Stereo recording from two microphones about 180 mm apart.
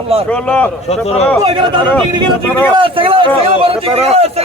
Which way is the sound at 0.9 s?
35° left (ahead or behind).